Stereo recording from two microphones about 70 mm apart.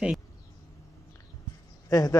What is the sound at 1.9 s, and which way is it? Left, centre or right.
Speech, left.